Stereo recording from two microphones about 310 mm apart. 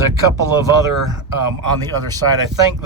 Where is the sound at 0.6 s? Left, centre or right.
Centre.